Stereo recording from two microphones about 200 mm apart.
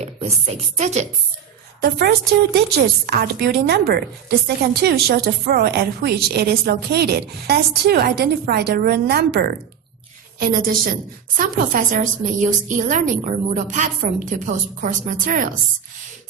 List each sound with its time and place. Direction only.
0.0 s a woman's voice: 35° right (ahead or behind)
1.8 s a woman's voice: 50° right (ahead or behind)